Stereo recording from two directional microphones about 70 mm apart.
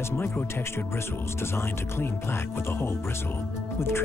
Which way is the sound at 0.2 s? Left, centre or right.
Left.